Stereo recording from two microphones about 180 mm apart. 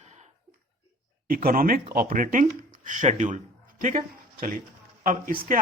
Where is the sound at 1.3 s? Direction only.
55° right (ahead or behind).